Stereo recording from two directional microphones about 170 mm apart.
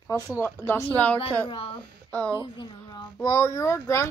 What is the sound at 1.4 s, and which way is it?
A child's voice, 30° left (ahead or behind).